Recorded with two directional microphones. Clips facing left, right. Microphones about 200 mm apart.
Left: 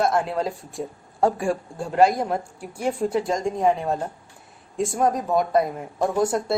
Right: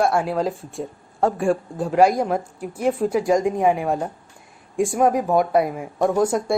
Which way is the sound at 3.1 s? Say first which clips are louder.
Right 5 dB; 15° right (ahead or behind).